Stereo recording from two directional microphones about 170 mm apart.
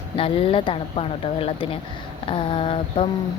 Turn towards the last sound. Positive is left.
turn(degrees=30)  # may be behind; listen again after turning